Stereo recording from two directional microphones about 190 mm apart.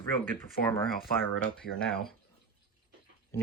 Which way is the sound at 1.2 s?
5° left (ahead or behind).